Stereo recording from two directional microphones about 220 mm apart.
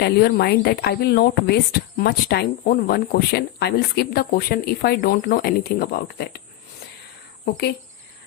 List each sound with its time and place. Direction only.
0.0 s speech: 45° left (ahead or behind)
7.4 s speech: 50° left (ahead or behind)